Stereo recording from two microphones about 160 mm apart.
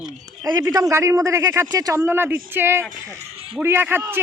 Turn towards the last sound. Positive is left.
turn(degrees=-15)  # may be behind; listen again after turning